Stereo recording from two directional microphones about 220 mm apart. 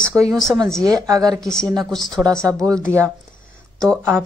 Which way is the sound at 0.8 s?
15° right (ahead or behind).